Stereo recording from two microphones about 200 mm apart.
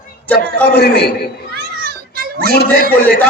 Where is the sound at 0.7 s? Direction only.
55° left (ahead or behind).